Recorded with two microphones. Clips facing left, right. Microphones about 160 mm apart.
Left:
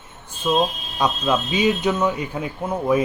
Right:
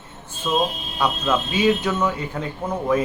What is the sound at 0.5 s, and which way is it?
Speech, 10° left (ahead or behind).